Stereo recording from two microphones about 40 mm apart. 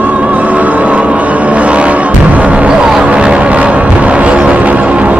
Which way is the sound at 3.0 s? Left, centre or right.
Right.